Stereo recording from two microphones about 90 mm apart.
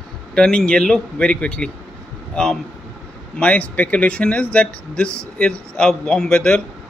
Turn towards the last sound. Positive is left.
turn(degrees=10)  # may be behind; listen again after turning